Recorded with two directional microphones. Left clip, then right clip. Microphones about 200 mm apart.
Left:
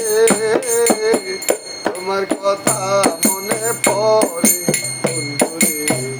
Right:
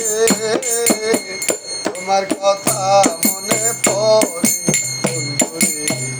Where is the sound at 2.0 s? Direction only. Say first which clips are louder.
Right 3 dB; 15° left (ahead or behind).